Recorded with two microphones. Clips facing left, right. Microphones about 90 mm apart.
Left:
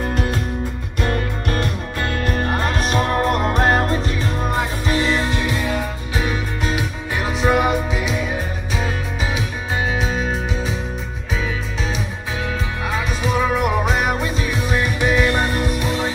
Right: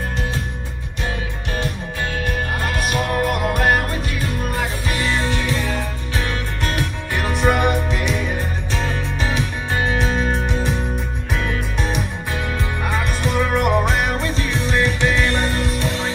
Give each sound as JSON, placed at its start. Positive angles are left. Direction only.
{"t": 1.0, "sound": "music", "side_deg": 55}